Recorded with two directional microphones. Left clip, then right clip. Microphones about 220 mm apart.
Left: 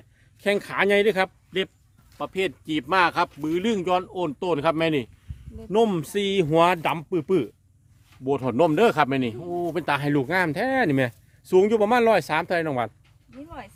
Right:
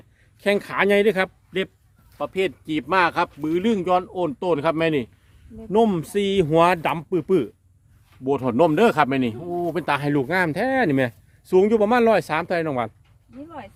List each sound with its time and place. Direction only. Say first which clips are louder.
0.3 s speech: right 2 dB; 5° left (ahead or behind)
13.3 s speech: right 2 dB; 50° left (ahead or behind)